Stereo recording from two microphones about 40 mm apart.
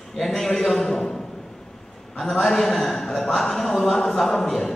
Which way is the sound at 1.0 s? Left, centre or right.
Left.